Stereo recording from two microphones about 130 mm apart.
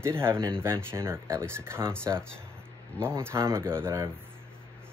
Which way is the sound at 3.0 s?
20° right (ahead or behind).